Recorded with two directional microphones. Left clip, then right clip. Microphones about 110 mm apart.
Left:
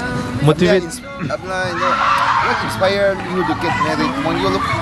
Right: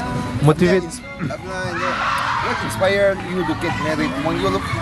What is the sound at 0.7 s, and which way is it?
Speech, 15° left (ahead or behind).